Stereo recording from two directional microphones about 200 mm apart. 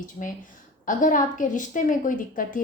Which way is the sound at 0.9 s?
40° left (ahead or behind).